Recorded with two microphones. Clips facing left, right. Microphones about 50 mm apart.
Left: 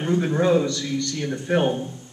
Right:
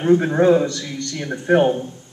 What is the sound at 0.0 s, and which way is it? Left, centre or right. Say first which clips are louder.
A man's voice: right 6 dB; right.